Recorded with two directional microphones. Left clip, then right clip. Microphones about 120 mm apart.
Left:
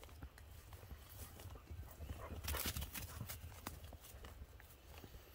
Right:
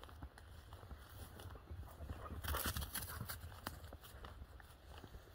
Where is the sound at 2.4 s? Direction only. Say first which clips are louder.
Right 2 dB; 45° right (ahead or behind).